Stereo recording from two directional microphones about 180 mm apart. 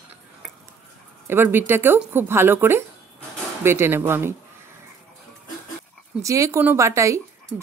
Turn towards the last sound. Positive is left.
turn(degrees=-10)  # may be behind; listen again after turning